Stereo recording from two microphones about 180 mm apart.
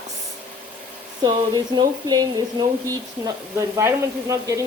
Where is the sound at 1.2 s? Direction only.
25° right (ahead or behind).